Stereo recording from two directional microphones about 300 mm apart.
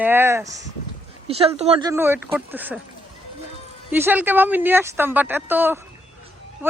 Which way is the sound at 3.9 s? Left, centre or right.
Centre.